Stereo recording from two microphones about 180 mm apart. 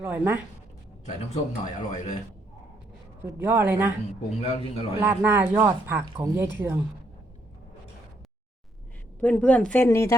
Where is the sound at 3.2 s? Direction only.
10° right (ahead or behind).